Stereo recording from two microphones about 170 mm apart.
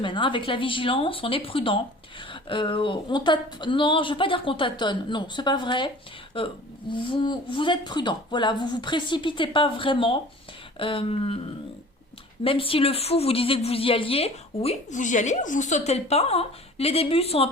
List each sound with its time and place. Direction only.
0.0 s a woman's voice: 30° left (ahead or behind)
12.4 s a woman's voice: 30° left (ahead or behind)